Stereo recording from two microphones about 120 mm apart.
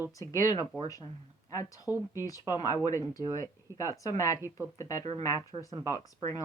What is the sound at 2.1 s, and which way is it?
Speech, 30° left (ahead or behind).